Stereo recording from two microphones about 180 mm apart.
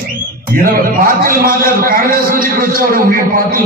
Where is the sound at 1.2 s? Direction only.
55° right (ahead or behind).